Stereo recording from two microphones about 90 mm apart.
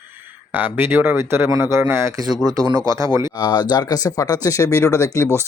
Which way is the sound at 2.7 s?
40° right (ahead or behind).